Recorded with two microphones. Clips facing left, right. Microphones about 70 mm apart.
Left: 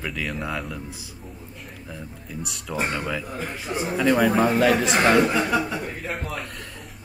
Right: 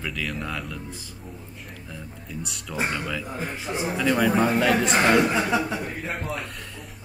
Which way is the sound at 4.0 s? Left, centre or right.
Centre.